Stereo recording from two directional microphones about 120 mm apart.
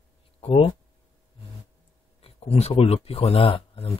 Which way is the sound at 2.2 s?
60° left (ahead or behind).